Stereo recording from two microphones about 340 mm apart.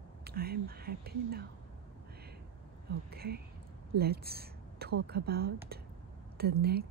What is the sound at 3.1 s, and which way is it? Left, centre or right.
A woman's voice, right.